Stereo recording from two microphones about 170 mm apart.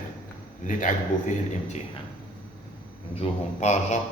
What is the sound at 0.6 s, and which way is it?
Speech, 50° left (ahead or behind).